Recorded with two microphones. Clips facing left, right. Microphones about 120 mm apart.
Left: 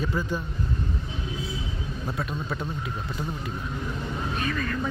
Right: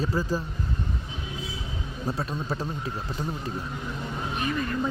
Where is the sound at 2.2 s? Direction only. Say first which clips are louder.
Left 2 dB; 30° right (ahead or behind).